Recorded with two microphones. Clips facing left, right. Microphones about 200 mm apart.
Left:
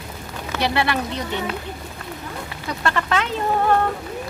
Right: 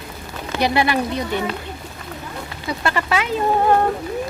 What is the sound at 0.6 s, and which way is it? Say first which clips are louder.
Speech: right 3 dB; 15° right (ahead or behind).